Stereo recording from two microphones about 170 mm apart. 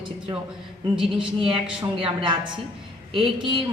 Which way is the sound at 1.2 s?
30° right (ahead or behind).